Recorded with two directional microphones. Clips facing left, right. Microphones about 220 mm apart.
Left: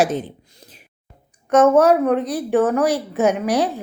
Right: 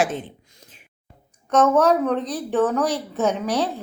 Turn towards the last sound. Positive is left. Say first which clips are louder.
# left 4 dB
turn(degrees=15)  # may be behind; listen again after turning